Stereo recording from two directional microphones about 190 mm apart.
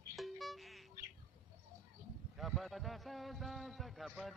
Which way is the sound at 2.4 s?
Centre (ahead or behind).